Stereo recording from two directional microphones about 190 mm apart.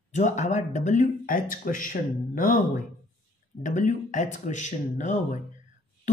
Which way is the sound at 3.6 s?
40° left (ahead or behind).